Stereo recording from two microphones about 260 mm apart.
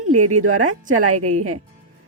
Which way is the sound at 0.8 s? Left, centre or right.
Right.